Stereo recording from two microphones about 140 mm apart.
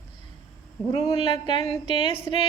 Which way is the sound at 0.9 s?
30° left (ahead or behind).